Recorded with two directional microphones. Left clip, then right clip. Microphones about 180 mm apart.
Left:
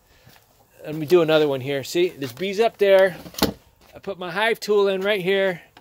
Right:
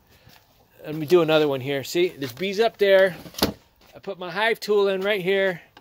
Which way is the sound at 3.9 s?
20° left (ahead or behind).